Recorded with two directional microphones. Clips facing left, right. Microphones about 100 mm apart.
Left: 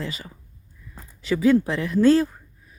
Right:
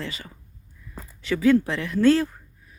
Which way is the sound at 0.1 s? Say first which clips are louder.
Left 3 dB; 20° left (ahead or behind).